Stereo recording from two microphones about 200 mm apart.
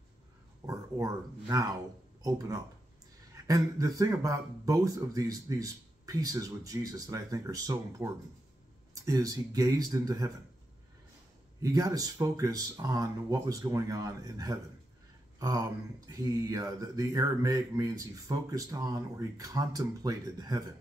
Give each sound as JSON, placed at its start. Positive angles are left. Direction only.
{"t": 0.7, "sound": "speech", "side_deg": -15}
{"t": 11.6, "sound": "speech", "side_deg": -20}